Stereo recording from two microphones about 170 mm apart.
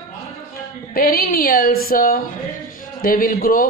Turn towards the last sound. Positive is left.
turn(degrees=55)  # may be behind; listen again after turning